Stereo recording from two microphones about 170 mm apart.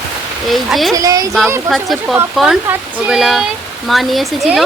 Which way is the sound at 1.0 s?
20° right (ahead or behind).